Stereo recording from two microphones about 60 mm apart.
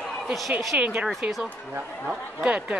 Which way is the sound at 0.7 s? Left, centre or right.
Right.